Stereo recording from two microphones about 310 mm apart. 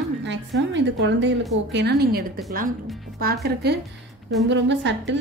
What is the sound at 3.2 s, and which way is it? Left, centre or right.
A woman's voice, right.